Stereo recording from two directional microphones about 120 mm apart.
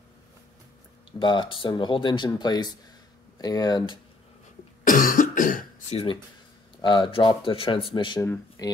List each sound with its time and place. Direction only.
1.2 s speech: 40° left (ahead or behind)
4.8 s cough: 90° left
6.8 s speech: 40° left (ahead or behind)
8.6 s speech: 30° left (ahead or behind)